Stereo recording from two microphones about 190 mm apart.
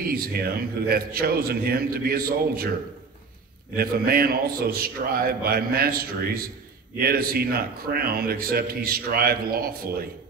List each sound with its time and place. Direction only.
0.0 s a man's voice: 50° right (ahead or behind)
3.7 s a man's voice: 50° right (ahead or behind)